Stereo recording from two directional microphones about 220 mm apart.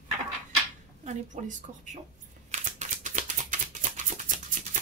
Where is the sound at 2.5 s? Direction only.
35° right (ahead or behind).